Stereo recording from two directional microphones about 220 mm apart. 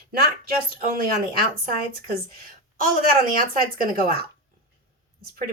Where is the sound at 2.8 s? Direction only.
40° right (ahead or behind).